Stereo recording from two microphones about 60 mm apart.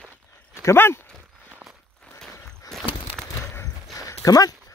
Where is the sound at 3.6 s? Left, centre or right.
Left.